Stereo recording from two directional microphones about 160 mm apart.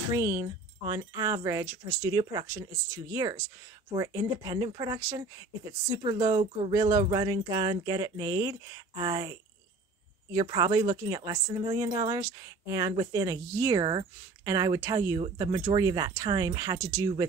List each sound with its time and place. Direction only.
0.1 s speech: 15° right (ahead or behind)
10.4 s speech: 25° right (ahead or behind)